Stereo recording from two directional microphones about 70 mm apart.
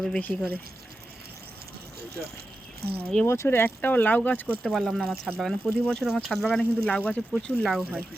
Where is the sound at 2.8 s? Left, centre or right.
Right.